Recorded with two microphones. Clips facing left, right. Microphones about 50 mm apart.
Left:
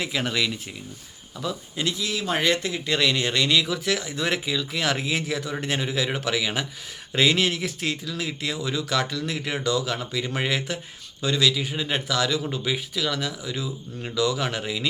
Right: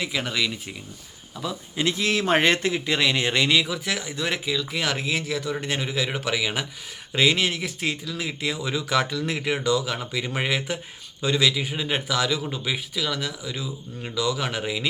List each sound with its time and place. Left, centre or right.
0.0 s speech: centre
2.0 s a man's voice: right
2.2 s a man's voice: right
2.7 s speech: centre